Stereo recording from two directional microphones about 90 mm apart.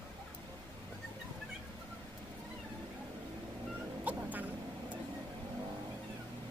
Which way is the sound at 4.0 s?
20° right (ahead or behind).